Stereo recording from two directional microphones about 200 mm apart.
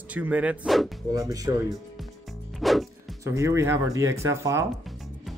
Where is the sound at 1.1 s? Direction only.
15° right (ahead or behind).